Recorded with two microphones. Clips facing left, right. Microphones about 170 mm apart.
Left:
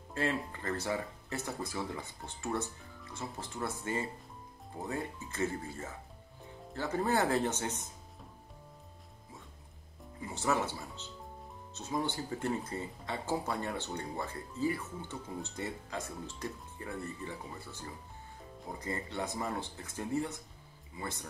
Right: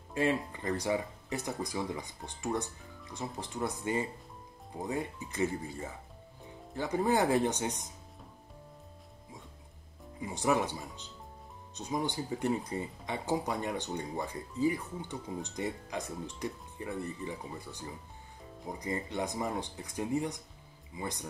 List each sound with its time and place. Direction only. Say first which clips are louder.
0.1 s speech: right 4 dB; 15° right (ahead or behind)
10.2 s speech: right 3 dB; 15° right (ahead or behind)